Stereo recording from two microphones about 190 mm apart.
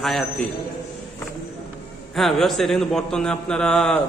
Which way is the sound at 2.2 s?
Centre (ahead or behind).